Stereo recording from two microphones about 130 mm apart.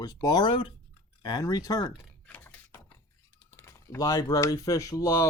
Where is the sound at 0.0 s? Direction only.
30° left (ahead or behind).